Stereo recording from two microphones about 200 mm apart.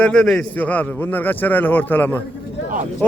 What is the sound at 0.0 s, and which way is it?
A man's voice, 5° left (ahead or behind).